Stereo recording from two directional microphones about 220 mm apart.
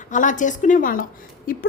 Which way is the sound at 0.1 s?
35° left (ahead or behind).